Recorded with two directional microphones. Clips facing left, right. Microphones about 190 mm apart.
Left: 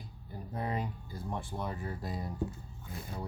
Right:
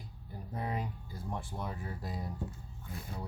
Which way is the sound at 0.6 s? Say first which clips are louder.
Left 2 dB; 5° right (ahead or behind).